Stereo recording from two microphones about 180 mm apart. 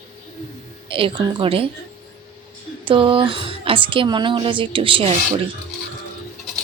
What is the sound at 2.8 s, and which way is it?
Speech, 30° right (ahead or behind).